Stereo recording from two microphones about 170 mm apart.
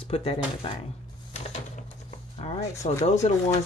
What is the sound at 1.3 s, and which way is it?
Printer, 40° left (ahead or behind).